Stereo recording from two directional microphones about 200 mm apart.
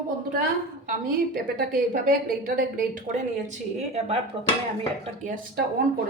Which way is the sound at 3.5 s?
35° right (ahead or behind).